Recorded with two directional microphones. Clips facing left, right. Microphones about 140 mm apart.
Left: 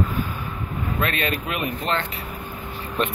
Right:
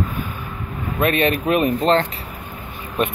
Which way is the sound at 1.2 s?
30° right (ahead or behind).